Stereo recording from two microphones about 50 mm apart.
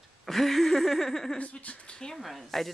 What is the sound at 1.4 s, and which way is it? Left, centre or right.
Speech, left.